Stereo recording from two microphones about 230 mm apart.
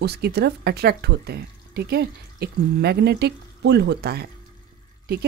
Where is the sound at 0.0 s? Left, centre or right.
Right.